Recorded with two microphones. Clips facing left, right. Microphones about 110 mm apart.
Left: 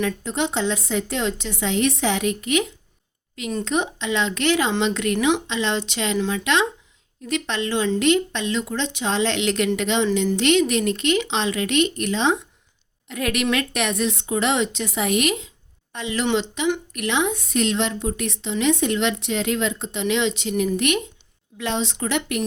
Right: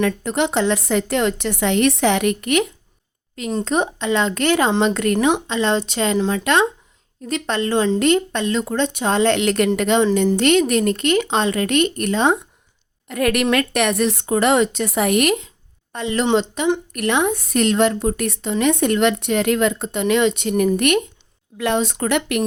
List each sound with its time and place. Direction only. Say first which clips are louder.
0.0 s a woman's voice: right 4 dB; 60° right (ahead or behind)
3.6 s a woman's voice: right 3 dB; 40° right (ahead or behind)
15.9 s a woman's voice: right 4 dB; 40° right (ahead or behind)
16.9 s a woman's voice: right 4 dB; 50° right (ahead or behind)